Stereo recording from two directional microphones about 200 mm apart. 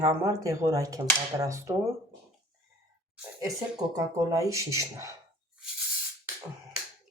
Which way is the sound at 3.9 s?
15° right (ahead or behind).